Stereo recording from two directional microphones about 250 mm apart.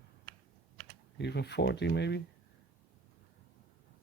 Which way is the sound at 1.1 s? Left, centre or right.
Left.